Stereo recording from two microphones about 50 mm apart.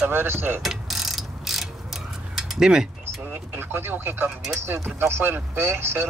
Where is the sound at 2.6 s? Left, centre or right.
Centre.